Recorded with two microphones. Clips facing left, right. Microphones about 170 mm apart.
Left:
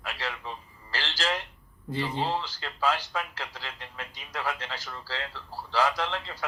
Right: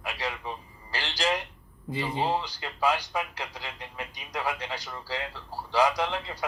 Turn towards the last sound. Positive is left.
turn(degrees=-15)  # may be behind; listen again after turning